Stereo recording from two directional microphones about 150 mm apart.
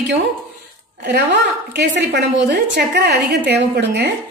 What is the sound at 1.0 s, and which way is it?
A woman's voice, 90° right.